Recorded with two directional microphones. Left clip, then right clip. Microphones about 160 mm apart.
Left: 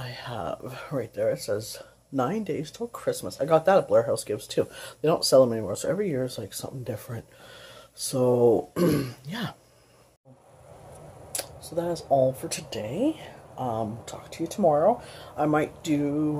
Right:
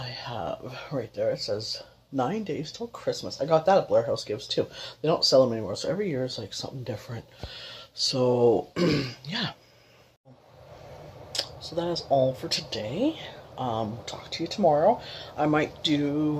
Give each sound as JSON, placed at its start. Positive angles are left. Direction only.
{"t": 0.0, "sound": "speech", "side_deg": 20}
{"t": 11.3, "sound": "speech", "side_deg": 15}